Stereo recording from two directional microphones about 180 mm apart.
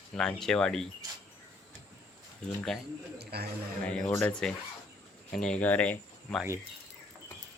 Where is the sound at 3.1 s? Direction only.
60° right (ahead or behind).